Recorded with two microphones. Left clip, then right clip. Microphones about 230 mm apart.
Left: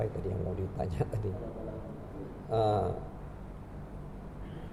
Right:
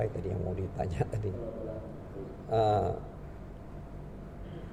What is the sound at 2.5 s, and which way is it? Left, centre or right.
Speech, right.